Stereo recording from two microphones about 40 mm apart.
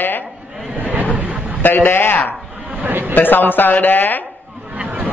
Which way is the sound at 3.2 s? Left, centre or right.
Left.